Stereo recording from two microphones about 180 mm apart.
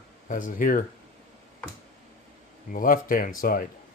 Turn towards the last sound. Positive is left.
turn(degrees=50)  # may be behind; listen again after turning